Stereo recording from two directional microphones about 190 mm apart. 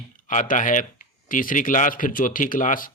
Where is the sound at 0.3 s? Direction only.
40° left (ahead or behind).